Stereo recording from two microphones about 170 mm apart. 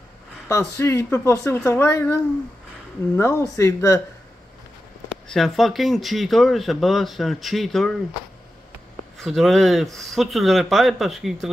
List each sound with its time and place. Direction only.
0.5 s speech: 15° left (ahead or behind)
5.3 s speech: centre (ahead or behind)
9.2 s speech: centre (ahead or behind)